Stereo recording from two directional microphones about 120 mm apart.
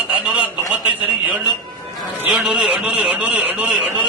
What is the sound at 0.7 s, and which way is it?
A man's voice, 15° right (ahead or behind).